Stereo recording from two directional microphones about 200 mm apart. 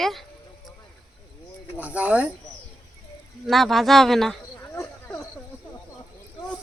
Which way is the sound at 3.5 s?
Centre (ahead or behind).